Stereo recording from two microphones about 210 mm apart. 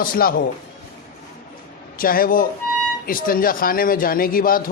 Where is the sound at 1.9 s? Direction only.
45° left (ahead or behind).